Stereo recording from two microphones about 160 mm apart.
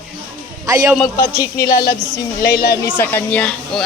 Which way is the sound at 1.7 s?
65° left (ahead or behind).